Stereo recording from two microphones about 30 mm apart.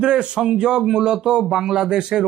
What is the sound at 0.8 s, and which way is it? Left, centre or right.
Speech, centre.